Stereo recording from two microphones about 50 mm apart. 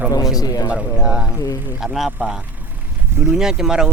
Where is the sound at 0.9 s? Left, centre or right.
Centre.